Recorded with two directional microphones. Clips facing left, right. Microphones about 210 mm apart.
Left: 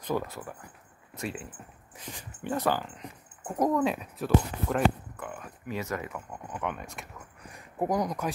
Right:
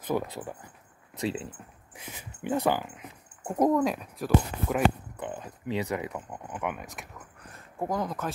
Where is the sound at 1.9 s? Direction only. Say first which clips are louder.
Left 1 dB; 10° right (ahead or behind).